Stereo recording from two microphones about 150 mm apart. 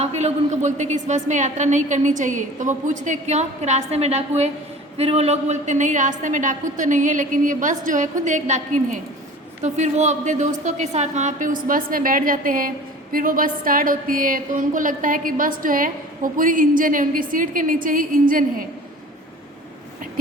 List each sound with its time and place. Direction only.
0.0 s a woman's voice: 45° right (ahead or behind); by 18.4 s 65° right (ahead or behind)